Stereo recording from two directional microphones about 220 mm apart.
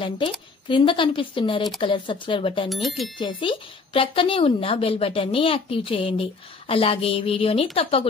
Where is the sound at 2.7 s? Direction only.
Centre (ahead or behind).